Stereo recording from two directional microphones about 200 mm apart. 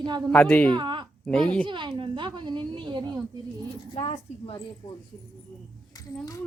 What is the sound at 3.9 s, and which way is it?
Speech, 30° left (ahead or behind).